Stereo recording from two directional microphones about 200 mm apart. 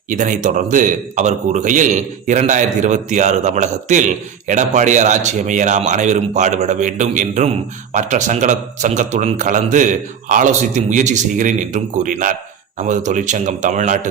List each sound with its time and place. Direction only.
0.1 s a man's voice: 40° right (ahead or behind)